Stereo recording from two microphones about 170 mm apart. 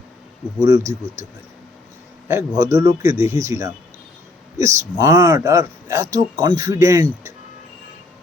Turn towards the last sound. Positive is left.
turn(degrees=-15)  # may be behind; listen again after turning